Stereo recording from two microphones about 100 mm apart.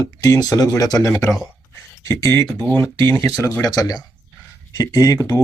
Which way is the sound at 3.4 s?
35° left (ahead or behind).